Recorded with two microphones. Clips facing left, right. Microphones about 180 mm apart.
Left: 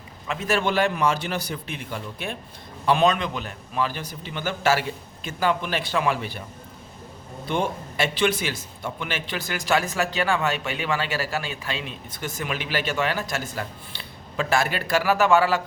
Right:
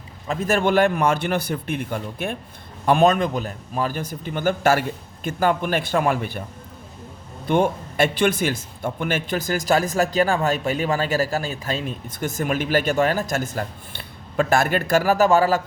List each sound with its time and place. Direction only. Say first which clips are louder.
0.3 s speech: right 4 dB; 45° right (ahead or behind)
7.4 s speech: right 6 dB; 50° right (ahead or behind)